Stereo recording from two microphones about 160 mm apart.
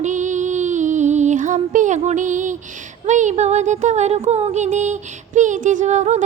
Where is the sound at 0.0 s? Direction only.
50° right (ahead or behind).